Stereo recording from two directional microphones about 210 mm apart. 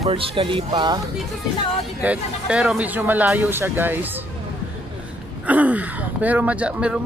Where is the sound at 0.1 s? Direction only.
25° right (ahead or behind).